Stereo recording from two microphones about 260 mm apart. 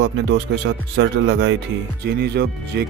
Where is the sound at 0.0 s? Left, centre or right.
Right.